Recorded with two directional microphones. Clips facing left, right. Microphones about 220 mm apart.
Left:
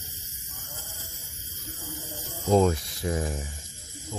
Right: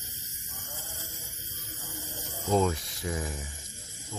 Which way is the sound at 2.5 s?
40° left (ahead or behind).